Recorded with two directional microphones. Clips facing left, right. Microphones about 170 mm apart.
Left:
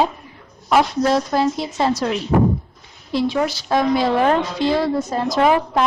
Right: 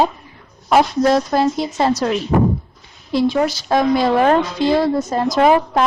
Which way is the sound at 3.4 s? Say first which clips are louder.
Right 2 dB; 45° right (ahead or behind).